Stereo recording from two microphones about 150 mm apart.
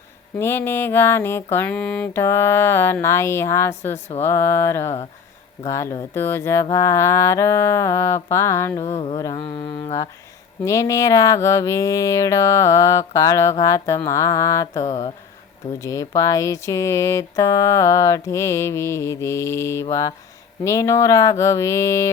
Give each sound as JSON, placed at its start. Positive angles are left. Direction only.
{"t": 0.3, "sound": "a sound", "side_deg": 15}
{"t": 5.6, "sound": "speech", "side_deg": 20}
{"t": 8.9, "sound": "mantra", "side_deg": 45}
{"t": 10.6, "sound": "speech", "side_deg": 20}